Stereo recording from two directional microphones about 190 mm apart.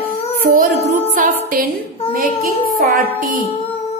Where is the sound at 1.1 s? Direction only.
45° right (ahead or behind).